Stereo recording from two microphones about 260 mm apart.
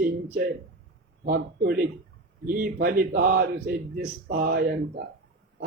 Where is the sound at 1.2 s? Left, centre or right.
Right.